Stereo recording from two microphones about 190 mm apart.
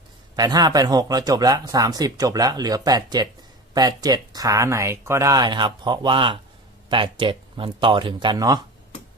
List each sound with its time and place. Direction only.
0.3 s speech: 20° right (ahead or behind)